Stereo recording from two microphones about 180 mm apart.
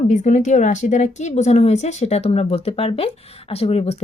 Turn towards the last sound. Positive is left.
turn(degrees=35)  # may be behind; listen again after turning